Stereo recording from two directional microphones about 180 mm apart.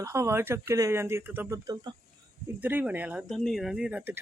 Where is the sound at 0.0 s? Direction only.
15° right (ahead or behind).